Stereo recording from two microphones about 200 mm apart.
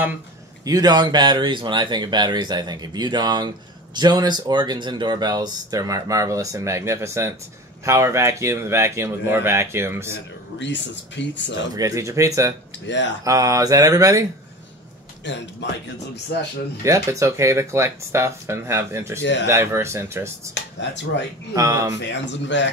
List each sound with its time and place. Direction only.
0.7 s speech: 20° right (ahead or behind)
10.6 s speech: 60° left (ahead or behind)
11.7 s speech: 15° right (ahead or behind)
12.8 s speech: 65° left (ahead or behind)
13.2 s speech: 15° right (ahead or behind)
15.2 s speech: 60° left (ahead or behind)
16.8 s speech: 15° right (ahead or behind)
20.5 s speech: 60° left (ahead or behind)
21.5 s speech: 15° right (ahead or behind)
22.0 s speech: 60° left (ahead or behind)